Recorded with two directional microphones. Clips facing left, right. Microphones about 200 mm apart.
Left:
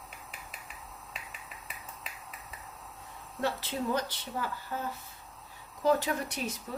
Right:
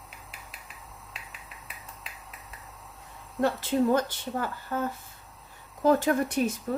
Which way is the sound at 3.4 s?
45° right (ahead or behind).